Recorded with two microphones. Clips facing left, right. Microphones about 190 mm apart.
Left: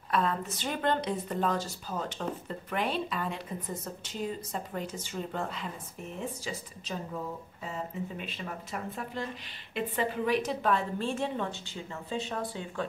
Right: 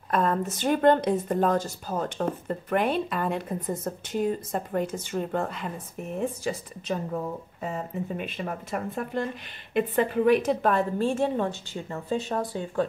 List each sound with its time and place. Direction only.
0.1 s a woman's voice: 45° right (ahead or behind)